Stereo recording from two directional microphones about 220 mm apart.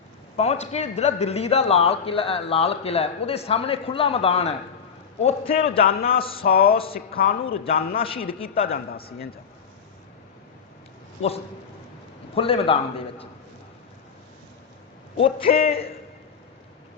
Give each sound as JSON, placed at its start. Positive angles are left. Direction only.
{"t": 0.3, "sound": "a man's voice", "side_deg": 30}
{"t": 6.4, "sound": "speech", "side_deg": 40}
{"t": 6.7, "sound": "a man's voice", "side_deg": 25}
{"t": 8.7, "sound": "speech", "side_deg": 45}
{"t": 12.3, "sound": "a man's voice", "side_deg": 25}
{"t": 15.2, "sound": "a man's voice", "side_deg": 25}